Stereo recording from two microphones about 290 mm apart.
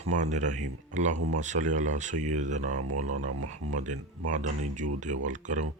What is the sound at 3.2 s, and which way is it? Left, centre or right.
Speech, right.